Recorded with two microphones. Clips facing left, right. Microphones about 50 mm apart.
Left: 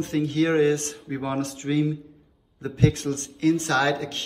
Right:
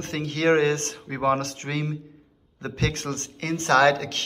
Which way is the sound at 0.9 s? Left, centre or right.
Right.